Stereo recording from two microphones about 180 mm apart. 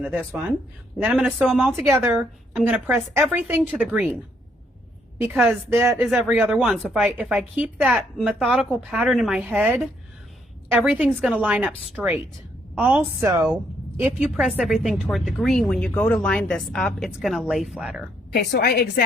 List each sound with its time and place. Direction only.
1.0 s a woman's voice: 5° right (ahead or behind)
1.7 s a woman's voice: 15° right (ahead or behind)
5.3 s a woman's voice: 10° right (ahead or behind)
18.3 s a woman's voice: 60° left (ahead or behind)